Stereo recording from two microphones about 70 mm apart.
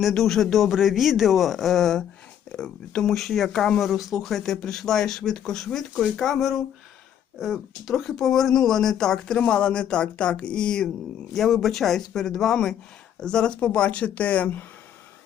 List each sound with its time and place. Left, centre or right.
0.0 s speech: centre; by 14.6 s left